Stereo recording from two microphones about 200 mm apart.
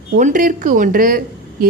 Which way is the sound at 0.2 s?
40° right (ahead or behind).